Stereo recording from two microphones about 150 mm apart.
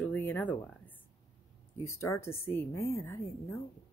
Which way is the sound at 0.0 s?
10° left (ahead or behind).